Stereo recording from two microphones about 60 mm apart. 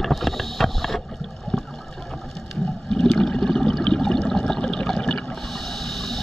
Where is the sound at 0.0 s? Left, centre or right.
Centre.